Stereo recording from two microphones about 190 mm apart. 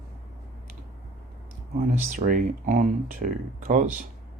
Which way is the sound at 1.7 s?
40° right (ahead or behind).